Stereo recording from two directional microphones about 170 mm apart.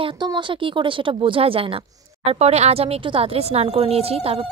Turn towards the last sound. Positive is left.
turn(degrees=-35)  # may be behind; listen again after turning